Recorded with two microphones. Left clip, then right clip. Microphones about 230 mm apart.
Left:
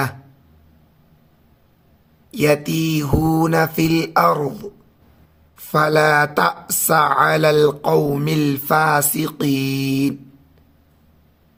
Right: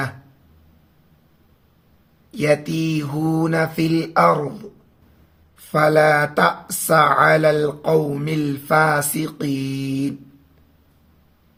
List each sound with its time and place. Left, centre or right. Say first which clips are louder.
2.3 s speech: left 2 dB; left